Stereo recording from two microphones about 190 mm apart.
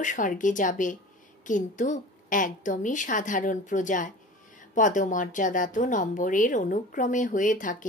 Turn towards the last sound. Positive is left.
turn(degrees=45)  # may be behind; listen again after turning